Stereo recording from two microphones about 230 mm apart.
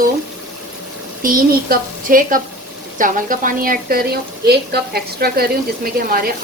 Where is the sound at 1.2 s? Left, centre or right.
Right.